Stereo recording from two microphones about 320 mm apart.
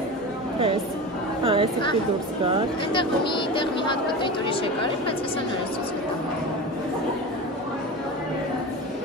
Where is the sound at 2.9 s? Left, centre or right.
Centre.